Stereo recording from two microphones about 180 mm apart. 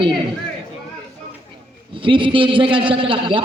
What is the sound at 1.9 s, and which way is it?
A man's voice, 30° right (ahead or behind).